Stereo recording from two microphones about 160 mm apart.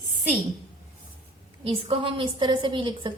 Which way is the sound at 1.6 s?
35° right (ahead or behind).